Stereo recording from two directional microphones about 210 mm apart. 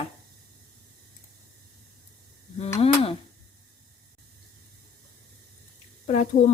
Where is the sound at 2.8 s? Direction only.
30° left (ahead or behind).